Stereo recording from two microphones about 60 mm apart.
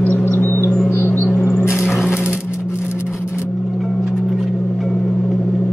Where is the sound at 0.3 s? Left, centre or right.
Left.